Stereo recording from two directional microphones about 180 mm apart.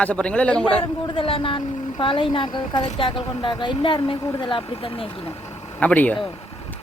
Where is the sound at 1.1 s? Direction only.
30° left (ahead or behind).